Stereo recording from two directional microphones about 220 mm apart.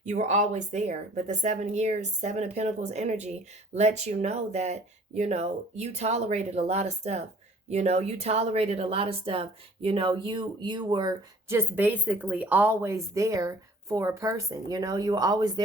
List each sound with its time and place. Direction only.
0.0 s speech: 30° right (ahead or behind); by 15.6 s 15° right (ahead or behind)